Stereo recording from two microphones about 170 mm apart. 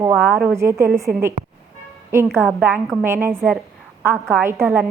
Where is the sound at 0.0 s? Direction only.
15° right (ahead or behind).